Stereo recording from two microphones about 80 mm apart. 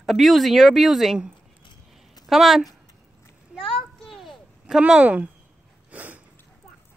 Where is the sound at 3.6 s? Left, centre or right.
Centre.